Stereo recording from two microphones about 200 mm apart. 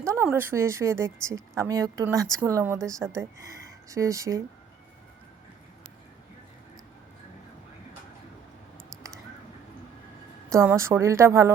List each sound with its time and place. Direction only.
0.0 s a sound: 15° right (ahead or behind)
0.3 s a woman's voice: 10° right (ahead or behind)
10.5 s a woman's voice: 15° right (ahead or behind)